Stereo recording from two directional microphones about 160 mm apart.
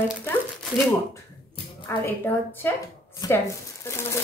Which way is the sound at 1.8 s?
15° left (ahead or behind).